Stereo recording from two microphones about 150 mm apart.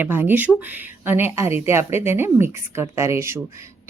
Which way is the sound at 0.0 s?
15° right (ahead or behind).